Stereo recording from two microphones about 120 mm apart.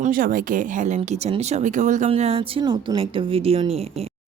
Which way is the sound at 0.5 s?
90° right.